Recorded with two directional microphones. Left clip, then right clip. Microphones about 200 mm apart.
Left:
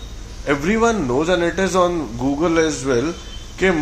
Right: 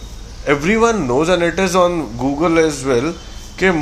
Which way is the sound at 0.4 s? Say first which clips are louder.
Right 3 dB; 25° right (ahead or behind).